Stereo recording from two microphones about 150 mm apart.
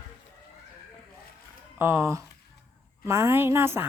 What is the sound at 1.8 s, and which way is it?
Speech, 15° right (ahead or behind).